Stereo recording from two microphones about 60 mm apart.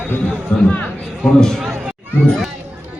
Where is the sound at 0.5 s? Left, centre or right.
Left.